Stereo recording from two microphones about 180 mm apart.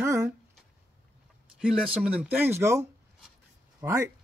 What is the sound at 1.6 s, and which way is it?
Speech, 5° right (ahead or behind).